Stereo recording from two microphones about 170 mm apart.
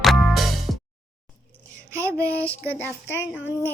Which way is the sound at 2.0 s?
15° right (ahead or behind).